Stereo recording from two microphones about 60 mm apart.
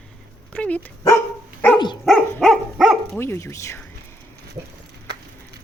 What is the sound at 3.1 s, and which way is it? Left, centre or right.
Speech, left.